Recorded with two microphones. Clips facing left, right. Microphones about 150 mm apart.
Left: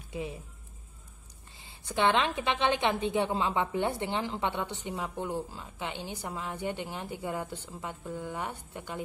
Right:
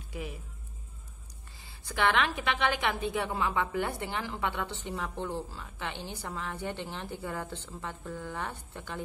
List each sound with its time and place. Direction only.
0.1 s speech: 25° left (ahead or behind)
1.6 s a woman's voice: 20° left (ahead or behind)